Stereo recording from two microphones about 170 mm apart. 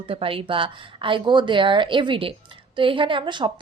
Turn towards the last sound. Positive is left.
turn(degrees=-30)  # may be behind; listen again after turning